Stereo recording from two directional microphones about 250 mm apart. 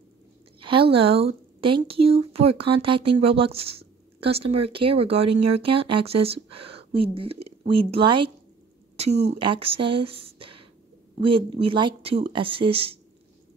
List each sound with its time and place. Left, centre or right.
0.6 s speech: right